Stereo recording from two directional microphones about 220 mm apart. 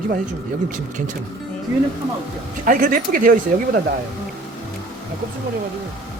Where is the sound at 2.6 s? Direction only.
40° right (ahead or behind).